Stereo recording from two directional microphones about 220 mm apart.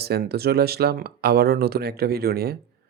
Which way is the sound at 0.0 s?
45° right (ahead or behind).